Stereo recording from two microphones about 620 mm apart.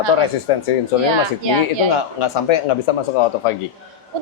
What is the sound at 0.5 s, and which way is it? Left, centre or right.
Speech, left.